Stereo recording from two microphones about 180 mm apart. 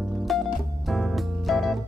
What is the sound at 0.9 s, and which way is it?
Keyboard, centre (ahead or behind).